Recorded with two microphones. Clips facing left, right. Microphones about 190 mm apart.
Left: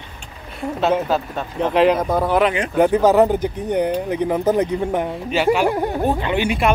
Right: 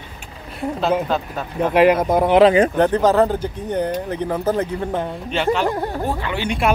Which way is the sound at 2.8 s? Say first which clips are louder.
Left 2 dB; 10° left (ahead or behind).